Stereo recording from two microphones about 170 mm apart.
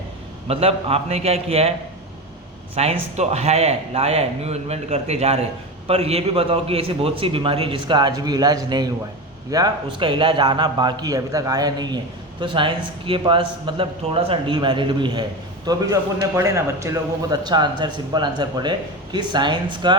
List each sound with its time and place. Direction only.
0.4 s a man's voice: 35° right (ahead or behind)
2.7 s a man's voice: 35° right (ahead or behind)